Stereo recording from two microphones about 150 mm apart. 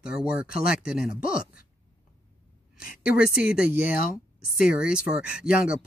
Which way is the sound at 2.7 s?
70° left (ahead or behind).